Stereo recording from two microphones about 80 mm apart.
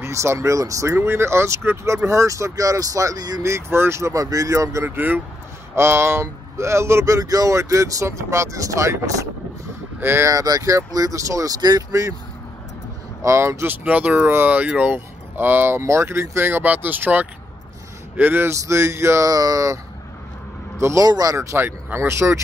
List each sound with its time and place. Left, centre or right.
0.0 s speech: right
3.4 s speech: right
4.8 s speech: right
9.9 s speech: right
10.3 s speech: right
11.9 s speech: right
13.2 s speech: right
13.8 s a man's voice: right
21.0 s speech: right